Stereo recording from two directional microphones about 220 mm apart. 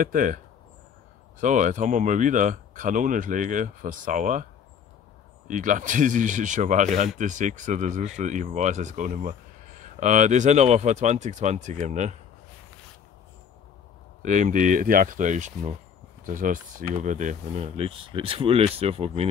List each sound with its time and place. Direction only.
0.0 s speech: 40° right (ahead or behind)
1.4 s speech: 35° right (ahead or behind)
5.5 s speech: 35° right (ahead or behind)
14.2 s speech: 35° right (ahead or behind)